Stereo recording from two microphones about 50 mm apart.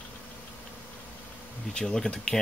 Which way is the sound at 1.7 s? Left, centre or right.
Centre.